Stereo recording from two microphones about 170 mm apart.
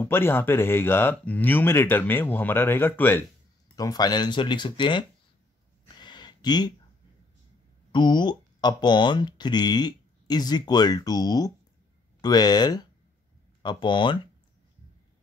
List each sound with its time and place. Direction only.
0.0 s speech: 15° left (ahead or behind)
5.9 s a sound: 25° left (ahead or behind)
7.9 s speech: 25° left (ahead or behind)